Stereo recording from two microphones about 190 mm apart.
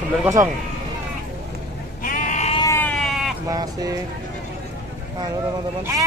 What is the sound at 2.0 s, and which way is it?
Sheep, 45° left (ahead or behind).